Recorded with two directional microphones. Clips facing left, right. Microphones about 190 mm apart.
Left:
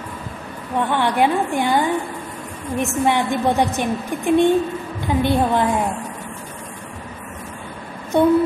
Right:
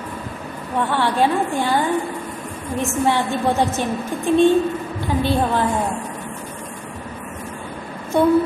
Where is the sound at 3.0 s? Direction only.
15° left (ahead or behind).